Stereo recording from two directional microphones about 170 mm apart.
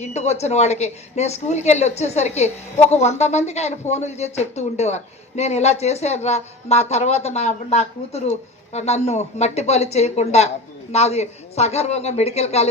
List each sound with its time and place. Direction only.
0.0 s a woman's voice: 40° left (ahead or behind)